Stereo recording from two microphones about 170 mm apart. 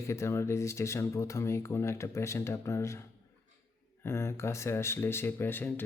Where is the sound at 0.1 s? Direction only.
15° left (ahead or behind).